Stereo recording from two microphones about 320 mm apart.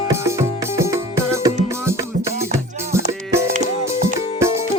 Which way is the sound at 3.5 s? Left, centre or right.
Right.